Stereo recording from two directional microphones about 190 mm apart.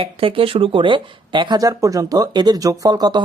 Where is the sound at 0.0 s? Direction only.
30° right (ahead or behind).